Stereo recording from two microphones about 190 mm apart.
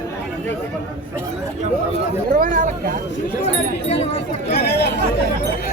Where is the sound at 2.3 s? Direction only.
45° right (ahead or behind).